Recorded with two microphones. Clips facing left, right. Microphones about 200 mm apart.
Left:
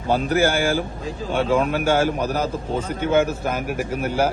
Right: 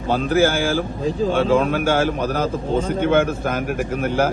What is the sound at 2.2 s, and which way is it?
Speech, 10° left (ahead or behind).